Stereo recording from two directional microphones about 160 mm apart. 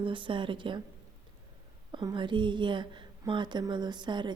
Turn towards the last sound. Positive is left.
turn(degrees=-30)  # may be behind; listen again after turning